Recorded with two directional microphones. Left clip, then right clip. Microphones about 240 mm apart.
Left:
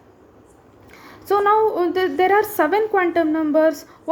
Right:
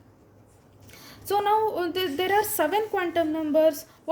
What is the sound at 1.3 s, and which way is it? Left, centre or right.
A woman's voice, right.